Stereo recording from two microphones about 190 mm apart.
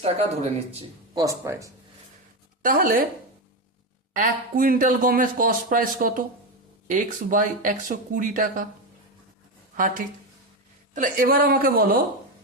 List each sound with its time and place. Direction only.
1.1 s speech: 20° right (ahead or behind)
2.6 s speech: 45° right (ahead or behind)
4.1 s a man's voice: 45° right (ahead or behind)
9.7 s a man's voice: 45° right (ahead or behind)